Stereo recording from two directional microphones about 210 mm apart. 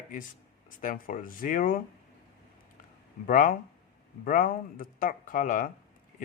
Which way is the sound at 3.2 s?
40° left (ahead or behind).